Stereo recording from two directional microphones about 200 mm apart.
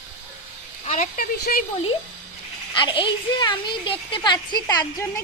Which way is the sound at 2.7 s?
25° left (ahead or behind).